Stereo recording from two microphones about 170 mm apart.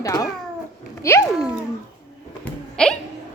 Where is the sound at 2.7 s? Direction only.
5° left (ahead or behind).